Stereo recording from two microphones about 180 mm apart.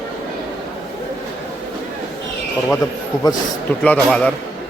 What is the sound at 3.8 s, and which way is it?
Speech, 5° left (ahead or behind).